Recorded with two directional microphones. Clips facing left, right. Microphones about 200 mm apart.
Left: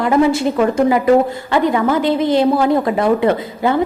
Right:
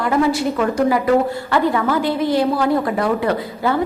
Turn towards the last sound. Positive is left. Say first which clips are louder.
# left 3 dB
turn(degrees=20)  # may be behind; listen again after turning